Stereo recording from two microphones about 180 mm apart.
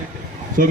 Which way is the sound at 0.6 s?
50° right (ahead or behind).